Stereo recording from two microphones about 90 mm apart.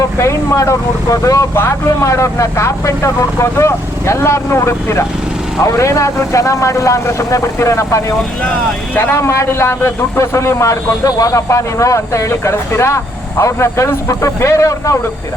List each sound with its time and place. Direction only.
0.2 s a man's voice: 35° left (ahead or behind)
9.1 s a man's voice: 30° left (ahead or behind)